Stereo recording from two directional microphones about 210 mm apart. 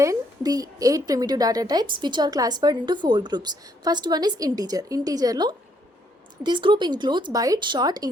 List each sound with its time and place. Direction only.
0.0 s a woman's voice: 15° right (ahead or behind)